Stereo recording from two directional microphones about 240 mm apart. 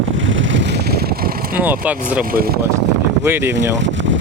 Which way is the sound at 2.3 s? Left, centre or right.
Right.